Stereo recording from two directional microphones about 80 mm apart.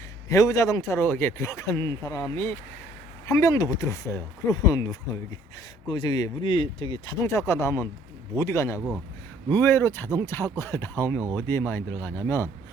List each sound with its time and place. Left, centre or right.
0.3 s speech: left
5.9 s a man's voice: left
6.4 s speech: left
7.2 s speech: left